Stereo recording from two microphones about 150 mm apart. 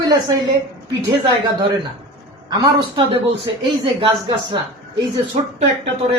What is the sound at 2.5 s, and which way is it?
Speech, 30° right (ahead or behind).